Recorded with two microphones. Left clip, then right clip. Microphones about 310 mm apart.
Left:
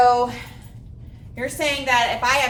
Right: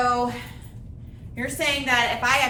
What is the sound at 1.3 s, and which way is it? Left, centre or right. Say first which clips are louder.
A woman's voice: left 1 dB; left.